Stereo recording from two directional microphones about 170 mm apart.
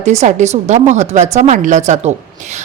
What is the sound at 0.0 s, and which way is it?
A woman's voice, 40° right (ahead or behind).